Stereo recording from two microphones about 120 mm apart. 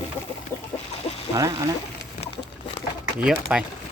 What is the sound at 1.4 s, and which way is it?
Speech, 25° right (ahead or behind).